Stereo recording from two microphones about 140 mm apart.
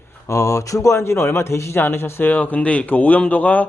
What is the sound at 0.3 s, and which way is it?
Speech, 20° left (ahead or behind).